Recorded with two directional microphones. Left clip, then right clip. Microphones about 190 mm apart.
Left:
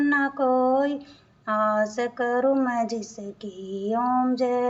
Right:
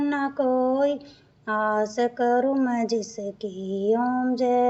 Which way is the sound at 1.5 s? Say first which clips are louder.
Left 1 dB; 50° right (ahead or behind).